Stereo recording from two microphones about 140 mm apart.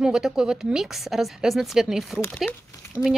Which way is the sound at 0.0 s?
5° right (ahead or behind).